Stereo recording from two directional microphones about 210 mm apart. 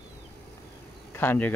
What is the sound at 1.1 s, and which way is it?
Speech, 10° left (ahead or behind).